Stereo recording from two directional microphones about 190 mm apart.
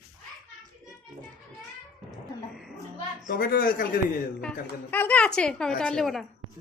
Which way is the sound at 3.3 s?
50° left (ahead or behind).